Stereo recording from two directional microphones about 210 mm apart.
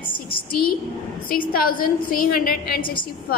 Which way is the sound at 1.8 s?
40° left (ahead or behind).